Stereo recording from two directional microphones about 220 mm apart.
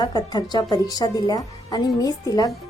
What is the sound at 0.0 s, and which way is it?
A woman's voice, 20° left (ahead or behind).